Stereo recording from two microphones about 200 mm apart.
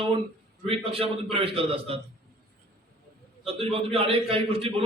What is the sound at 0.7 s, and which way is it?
A man's voice, 30° right (ahead or behind).